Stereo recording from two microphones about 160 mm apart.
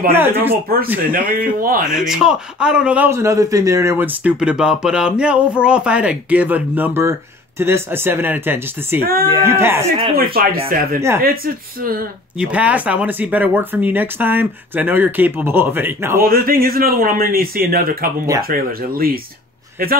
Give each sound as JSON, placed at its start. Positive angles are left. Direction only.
{"t": 0.1, "sound": "a man's voice", "side_deg": -15}
{"t": 1.1, "sound": "speech", "side_deg": -65}
{"t": 1.9, "sound": "a man's voice", "side_deg": -5}
{"t": 10.1, "sound": "speech", "side_deg": -70}
{"t": 12.4, "sound": "a man's voice", "side_deg": -10}
{"t": 16.2, "sound": "speech", "side_deg": -65}